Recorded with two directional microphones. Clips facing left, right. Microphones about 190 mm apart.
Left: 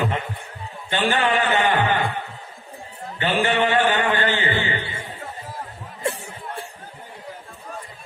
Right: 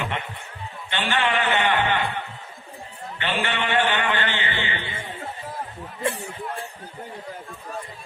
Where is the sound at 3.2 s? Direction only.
40° left (ahead or behind).